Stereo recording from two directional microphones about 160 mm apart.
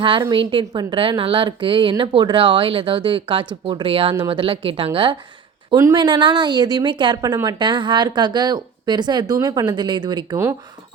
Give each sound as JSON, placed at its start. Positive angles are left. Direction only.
{"t": 0.0, "sound": "a woman's voice", "side_deg": -30}